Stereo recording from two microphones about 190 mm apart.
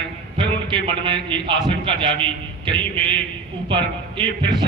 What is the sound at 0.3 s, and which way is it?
A man's voice, 25° right (ahead or behind).